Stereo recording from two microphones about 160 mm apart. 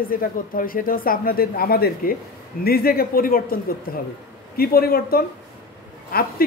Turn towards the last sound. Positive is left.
turn(degrees=70)  # may be behind; listen again after turning